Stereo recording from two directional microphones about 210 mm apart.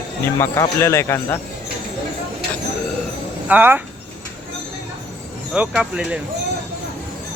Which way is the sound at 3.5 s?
10° right (ahead or behind).